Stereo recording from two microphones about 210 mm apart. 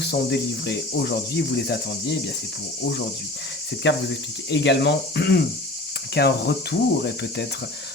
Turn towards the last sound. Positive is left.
turn(degrees=50)  # may be behind; listen again after turning